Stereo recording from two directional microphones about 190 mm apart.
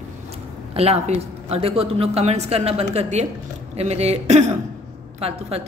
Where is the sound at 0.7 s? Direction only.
35° right (ahead or behind).